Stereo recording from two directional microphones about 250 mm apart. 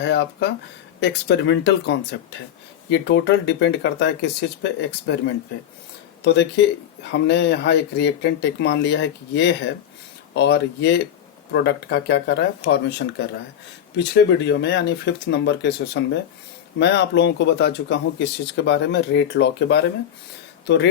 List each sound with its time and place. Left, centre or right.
0.0 s speech: left